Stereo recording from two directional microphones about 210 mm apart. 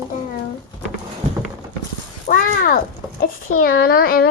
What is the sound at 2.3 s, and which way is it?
Speech, 45° left (ahead or behind).